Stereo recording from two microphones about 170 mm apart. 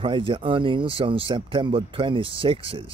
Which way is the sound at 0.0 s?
30° right (ahead or behind).